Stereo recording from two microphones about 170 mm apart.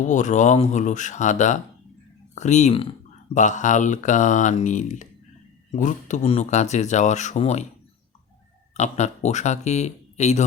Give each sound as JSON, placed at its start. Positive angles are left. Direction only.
{"t": 0.1, "sound": "speech", "side_deg": 45}
{"t": 8.7, "sound": "speech", "side_deg": 40}